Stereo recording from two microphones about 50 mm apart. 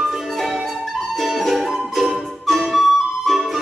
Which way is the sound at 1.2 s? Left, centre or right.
Centre.